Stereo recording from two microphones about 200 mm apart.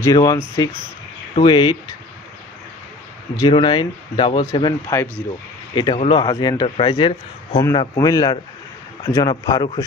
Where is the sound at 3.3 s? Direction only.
20° left (ahead or behind).